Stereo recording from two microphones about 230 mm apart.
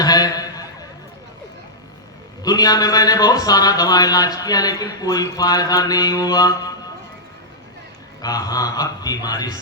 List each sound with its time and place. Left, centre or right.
0.0 s a sound: centre
2.4 s a man's voice: centre
8.2 s a man's voice: centre